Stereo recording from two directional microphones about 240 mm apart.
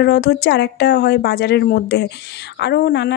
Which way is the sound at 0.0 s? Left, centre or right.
Left.